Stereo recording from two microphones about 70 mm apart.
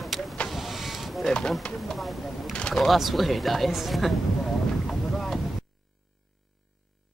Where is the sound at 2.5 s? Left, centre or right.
Centre.